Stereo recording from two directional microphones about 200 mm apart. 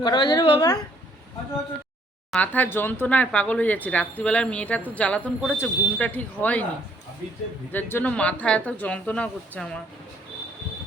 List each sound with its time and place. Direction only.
0.0 s speech: 20° left (ahead or behind)
2.3 s speech: 10° left (ahead or behind)
7.7 s speech: 10° left (ahead or behind)